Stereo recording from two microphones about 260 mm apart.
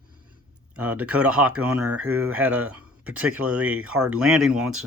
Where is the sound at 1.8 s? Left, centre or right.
Right.